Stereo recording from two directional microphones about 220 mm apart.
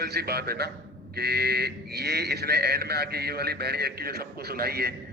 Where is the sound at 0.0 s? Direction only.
45° right (ahead or behind).